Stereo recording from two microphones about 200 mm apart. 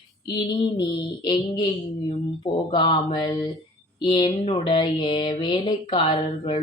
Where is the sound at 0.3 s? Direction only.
25° left (ahead or behind).